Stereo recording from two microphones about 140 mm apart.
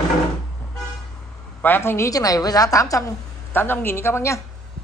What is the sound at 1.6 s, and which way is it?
A woman's voice, 15° left (ahead or behind).